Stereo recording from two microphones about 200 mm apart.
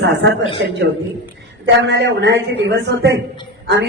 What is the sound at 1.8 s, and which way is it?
A man's voice, 60° right (ahead or behind).